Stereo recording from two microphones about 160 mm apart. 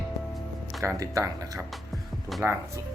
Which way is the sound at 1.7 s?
Centre (ahead or behind).